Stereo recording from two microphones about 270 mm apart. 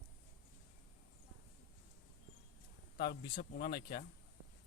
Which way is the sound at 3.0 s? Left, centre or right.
Left.